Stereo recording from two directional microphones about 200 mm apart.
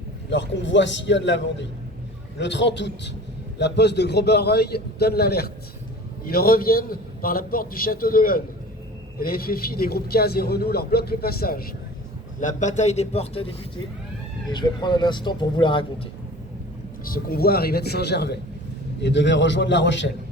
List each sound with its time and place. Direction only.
0.3 s a man's voice: 65° left (ahead or behind); by 13.5 s 30° left (ahead or behind)
14.5 s speech: 20° left (ahead or behind)
17.1 s a man's voice: 50° left (ahead or behind)